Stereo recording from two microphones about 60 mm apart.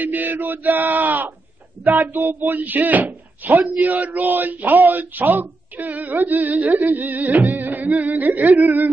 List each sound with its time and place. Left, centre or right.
0.0 s speech: right